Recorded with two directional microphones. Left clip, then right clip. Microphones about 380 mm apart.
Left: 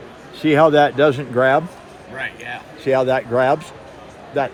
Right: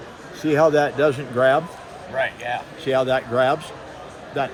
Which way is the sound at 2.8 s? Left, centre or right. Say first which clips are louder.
Left 4 dB; centre.